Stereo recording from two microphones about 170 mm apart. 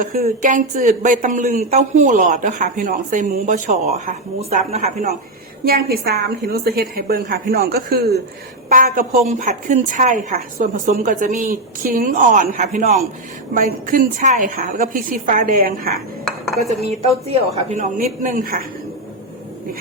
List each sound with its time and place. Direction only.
0.3 s speech: 45° right (ahead or behind)
5.6 s a woman's voice: 65° right (ahead or behind); by 13.0 s 40° right (ahead or behind)
13.5 s a woman's voice: 55° right (ahead or behind)
16.6 s a woman's voice: 40° right (ahead or behind)
18.2 s a woman's voice: 55° right (ahead or behind)